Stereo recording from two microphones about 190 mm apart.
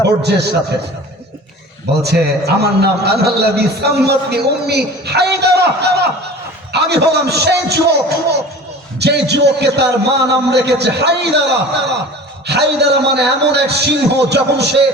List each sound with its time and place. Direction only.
0.0 s a man's voice: 60° right (ahead or behind)
2.0 s a man's voice: 60° right (ahead or behind)
12.5 s a man's voice: 60° right (ahead or behind)